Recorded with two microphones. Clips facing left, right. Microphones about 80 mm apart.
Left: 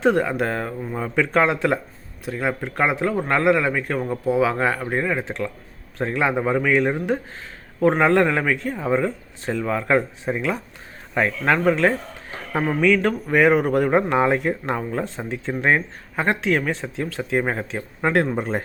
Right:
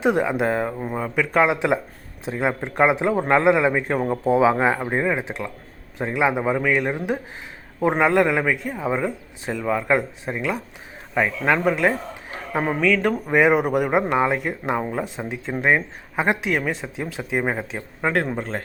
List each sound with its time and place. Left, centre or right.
0.0 s speech: centre
0.9 s a man's voice: centre
13.3 s speech: centre